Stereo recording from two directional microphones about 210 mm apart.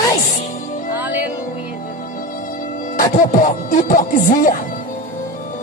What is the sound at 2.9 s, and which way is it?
Speech, 35° left (ahead or behind).